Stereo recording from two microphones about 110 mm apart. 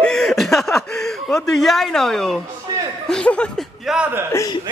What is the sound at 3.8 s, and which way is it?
Speech, 5° right (ahead or behind).